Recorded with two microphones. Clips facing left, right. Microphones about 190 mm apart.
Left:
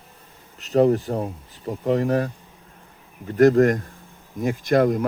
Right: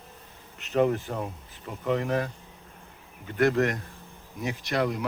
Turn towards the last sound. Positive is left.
turn(degrees=45)  # may be behind; listen again after turning